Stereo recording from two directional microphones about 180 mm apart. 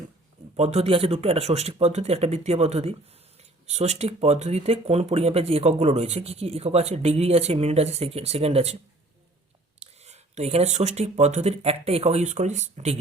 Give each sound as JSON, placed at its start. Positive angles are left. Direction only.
{"t": 0.5, "sound": "speech", "side_deg": -35}
{"t": 9.8, "sound": "speech", "side_deg": -35}